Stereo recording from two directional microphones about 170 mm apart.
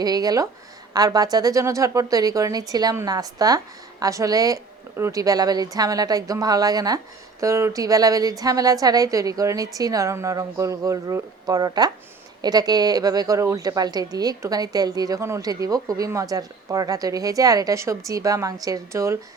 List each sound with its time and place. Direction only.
0.0 s a woman's voice: 20° right (ahead or behind)